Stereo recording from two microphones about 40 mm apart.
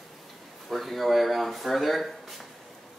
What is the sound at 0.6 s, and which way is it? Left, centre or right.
Speech, centre.